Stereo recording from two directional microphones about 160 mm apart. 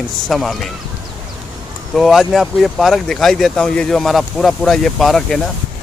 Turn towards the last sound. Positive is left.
turn(degrees=0)  # may be behind; listen again after turning